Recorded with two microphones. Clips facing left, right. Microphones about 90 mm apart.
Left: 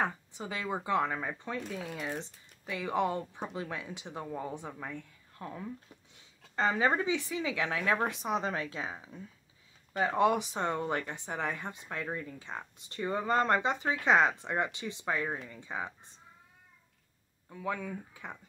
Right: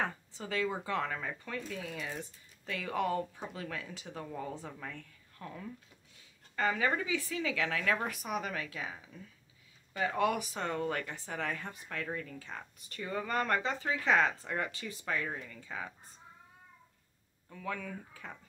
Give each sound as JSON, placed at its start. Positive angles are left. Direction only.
{"t": 0.0, "sound": "speech", "side_deg": 15}
{"t": 17.5, "sound": "speech", "side_deg": 15}